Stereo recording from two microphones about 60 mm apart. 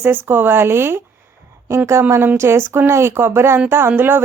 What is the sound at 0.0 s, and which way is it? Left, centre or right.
Speech, right.